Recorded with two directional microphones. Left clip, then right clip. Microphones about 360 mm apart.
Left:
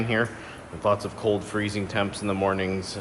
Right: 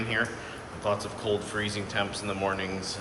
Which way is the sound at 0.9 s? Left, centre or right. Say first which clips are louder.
Left 5 dB; centre.